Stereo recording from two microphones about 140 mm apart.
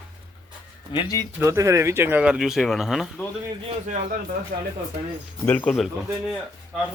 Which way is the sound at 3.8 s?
60° right (ahead or behind).